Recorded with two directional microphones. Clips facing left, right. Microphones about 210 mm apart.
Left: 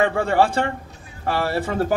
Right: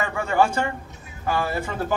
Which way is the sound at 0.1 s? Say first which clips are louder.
Left 3 dB; 30° left (ahead or behind).